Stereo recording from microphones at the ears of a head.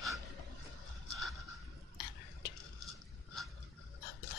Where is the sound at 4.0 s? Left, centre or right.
Left.